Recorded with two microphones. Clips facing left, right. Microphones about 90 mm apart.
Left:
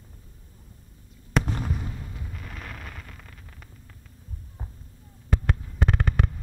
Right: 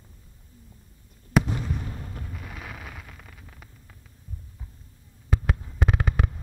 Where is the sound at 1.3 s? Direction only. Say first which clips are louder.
Right 3 dB; 5° right (ahead or behind).